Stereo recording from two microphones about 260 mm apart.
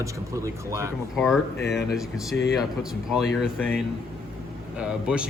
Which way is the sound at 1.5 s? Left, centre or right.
Left.